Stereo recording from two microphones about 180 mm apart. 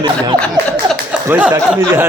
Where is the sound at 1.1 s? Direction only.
5° right (ahead or behind).